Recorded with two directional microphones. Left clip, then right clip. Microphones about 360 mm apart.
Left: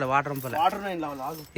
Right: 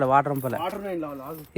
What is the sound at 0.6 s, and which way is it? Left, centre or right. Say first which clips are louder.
Speech: left 5 dB; centre.